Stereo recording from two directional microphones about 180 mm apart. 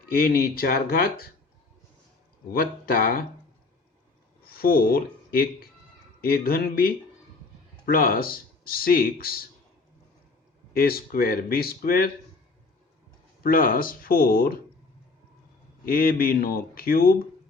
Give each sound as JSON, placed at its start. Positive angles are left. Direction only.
{"t": 0.1, "sound": "speech", "side_deg": 55}
{"t": 2.5, "sound": "speech", "side_deg": 55}
{"t": 4.4, "sound": "speech", "side_deg": 55}
{"t": 10.8, "sound": "speech", "side_deg": 55}
{"t": 13.4, "sound": "speech", "side_deg": 50}
{"t": 15.9, "sound": "speech", "side_deg": 55}